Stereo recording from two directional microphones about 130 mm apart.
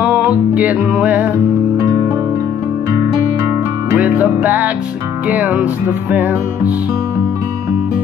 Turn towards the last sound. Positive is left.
turn(degrees=-15)  # may be behind; listen again after turning